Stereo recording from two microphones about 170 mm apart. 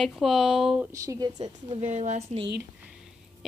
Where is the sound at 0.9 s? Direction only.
20° right (ahead or behind).